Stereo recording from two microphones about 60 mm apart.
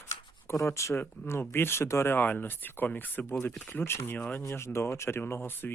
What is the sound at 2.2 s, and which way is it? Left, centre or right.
Speech, left.